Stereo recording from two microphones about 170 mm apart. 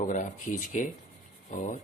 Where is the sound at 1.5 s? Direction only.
50° left (ahead or behind).